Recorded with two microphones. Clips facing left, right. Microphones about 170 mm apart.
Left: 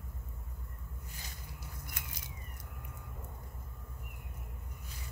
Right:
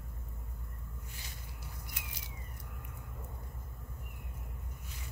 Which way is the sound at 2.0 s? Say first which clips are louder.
Left 1 dB; 50° left (ahead or behind).